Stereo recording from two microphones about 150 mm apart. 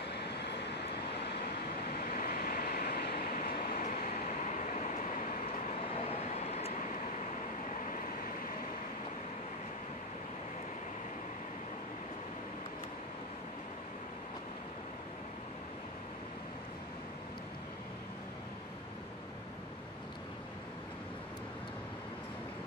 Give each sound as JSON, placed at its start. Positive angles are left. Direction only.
{"t": 2.0, "sound": "vehicle", "side_deg": 65}
{"t": 5.9, "sound": "vehicle", "side_deg": 45}